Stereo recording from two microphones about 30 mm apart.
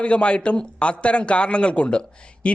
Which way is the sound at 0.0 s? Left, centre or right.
Left.